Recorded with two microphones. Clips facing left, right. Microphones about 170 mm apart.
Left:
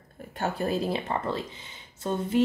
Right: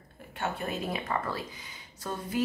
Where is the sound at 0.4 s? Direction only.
35° left (ahead or behind).